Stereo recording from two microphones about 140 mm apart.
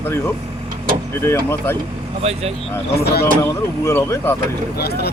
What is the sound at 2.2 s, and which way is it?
Speech, 50° right (ahead or behind).